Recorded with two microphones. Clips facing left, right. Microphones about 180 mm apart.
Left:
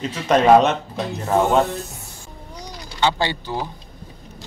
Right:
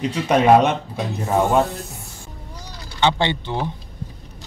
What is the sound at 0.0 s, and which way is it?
Speech, 10° right (ahead or behind).